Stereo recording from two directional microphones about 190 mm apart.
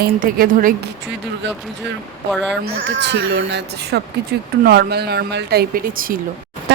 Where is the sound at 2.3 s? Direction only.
Centre (ahead or behind).